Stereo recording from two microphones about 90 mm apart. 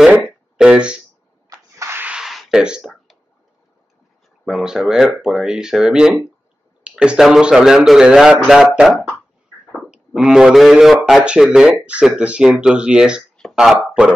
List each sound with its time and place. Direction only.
0.6 s speech: 10° right (ahead or behind)
1.8 s rub: 30° right (ahead or behind)
2.0 s a sound: 5° right (ahead or behind)
4.5 s speech: 5° right (ahead or behind)